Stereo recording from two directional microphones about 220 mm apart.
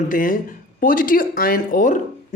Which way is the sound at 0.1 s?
35° left (ahead or behind).